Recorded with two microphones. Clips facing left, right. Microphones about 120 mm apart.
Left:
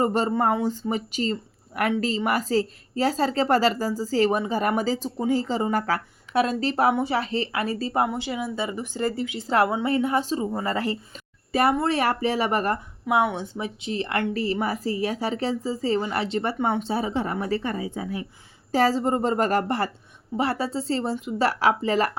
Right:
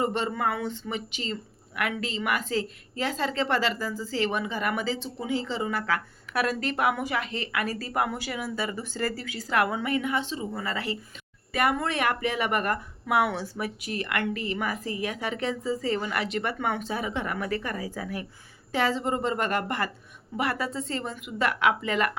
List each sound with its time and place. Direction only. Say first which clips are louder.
0.0 s speech: left 5 dB; 40° left (ahead or behind)
6.3 s speech: left 5 dB; 25° left (ahead or behind); by 10.9 s 40° left (ahead or behind)
11.5 s speech: left 5 dB; 30° left (ahead or behind)
18.7 s speech: left 5 dB; 40° left (ahead or behind)